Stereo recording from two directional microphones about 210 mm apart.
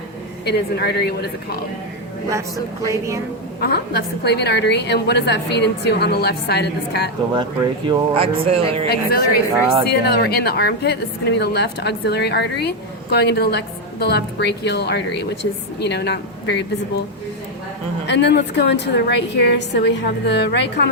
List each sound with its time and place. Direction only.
0.4 s a woman's voice: 50° left (ahead or behind)
2.8 s a woman's voice: 15° right (ahead or behind)
3.6 s a woman's voice: 50° left (ahead or behind)
7.3 s speech: 20° right (ahead or behind)
8.9 s a woman's voice: 45° left (ahead or behind)
18.0 s a woman's voice: 55° left (ahead or behind)